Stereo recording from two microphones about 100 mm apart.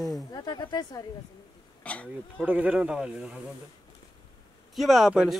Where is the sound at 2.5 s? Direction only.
15° right (ahead or behind).